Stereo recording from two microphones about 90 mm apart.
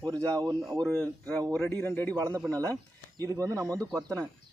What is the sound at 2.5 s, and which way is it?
Speech, 40° right (ahead or behind).